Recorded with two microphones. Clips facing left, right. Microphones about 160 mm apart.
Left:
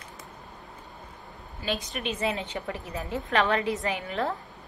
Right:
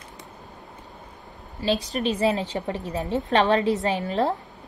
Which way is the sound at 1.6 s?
35° right (ahead or behind).